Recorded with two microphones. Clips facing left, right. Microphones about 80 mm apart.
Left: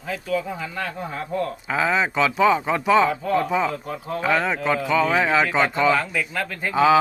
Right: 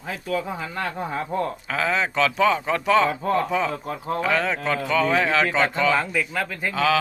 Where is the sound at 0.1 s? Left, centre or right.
Right.